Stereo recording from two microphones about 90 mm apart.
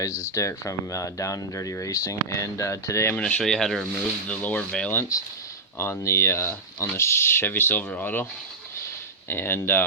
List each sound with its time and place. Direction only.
0.0 s speech: 35° left (ahead or behind)
3.1 s speech: 15° left (ahead or behind)
4.3 s speech: 15° left (ahead or behind)
5.8 s speech: 30° left (ahead or behind)
9.3 s speech: 25° left (ahead or behind)